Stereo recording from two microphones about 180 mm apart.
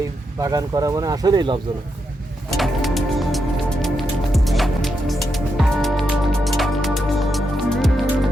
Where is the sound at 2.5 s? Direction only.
Centre (ahead or behind).